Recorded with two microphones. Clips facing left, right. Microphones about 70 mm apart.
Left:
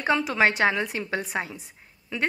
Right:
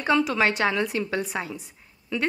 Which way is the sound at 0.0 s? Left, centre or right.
Left.